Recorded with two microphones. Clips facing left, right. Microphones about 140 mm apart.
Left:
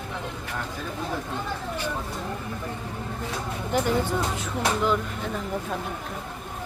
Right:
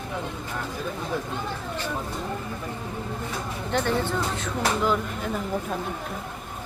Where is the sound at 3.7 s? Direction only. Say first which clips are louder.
Left 1 dB; 10° left (ahead or behind).